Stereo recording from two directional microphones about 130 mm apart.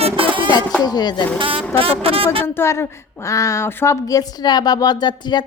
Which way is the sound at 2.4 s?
20° left (ahead or behind).